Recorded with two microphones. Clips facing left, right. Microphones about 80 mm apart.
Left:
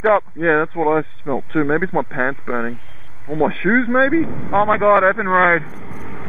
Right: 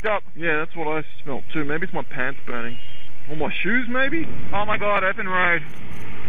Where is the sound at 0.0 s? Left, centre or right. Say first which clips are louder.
Left 8 dB; left.